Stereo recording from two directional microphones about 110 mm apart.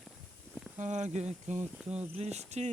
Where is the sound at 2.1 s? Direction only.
80° right.